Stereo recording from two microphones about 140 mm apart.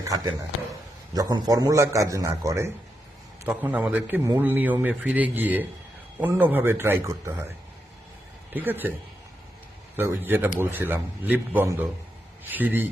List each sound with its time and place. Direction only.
0.0 s a man's voice: 25° right (ahead or behind)
3.4 s speech: 10° right (ahead or behind)
8.5 s speech: 15° right (ahead or behind)
10.0 s speech: 15° right (ahead or behind)